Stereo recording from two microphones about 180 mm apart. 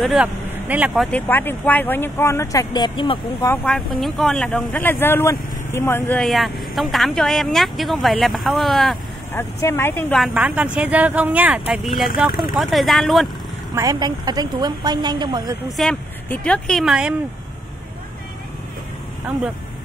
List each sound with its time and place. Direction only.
0.0 s speech: 5° right (ahead or behind)
1.1 s speech: 10° left (ahead or behind)
3.6 s speech: centre (ahead or behind)
6.2 s speech: centre (ahead or behind)
9.3 s speech: 15° left (ahead or behind)
10.1 s speech: 5° right (ahead or behind)
13.7 s a woman's voice: 20° right (ahead or behind)
15.7 s speech: 5° left (ahead or behind)